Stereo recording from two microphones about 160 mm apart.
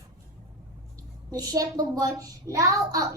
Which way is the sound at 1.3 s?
25° right (ahead or behind).